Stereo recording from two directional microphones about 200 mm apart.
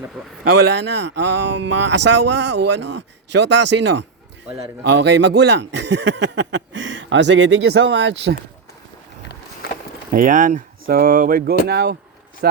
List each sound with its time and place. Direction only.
0.7 s speech: 60° right (ahead or behind)
10.1 s speech: 40° right (ahead or behind)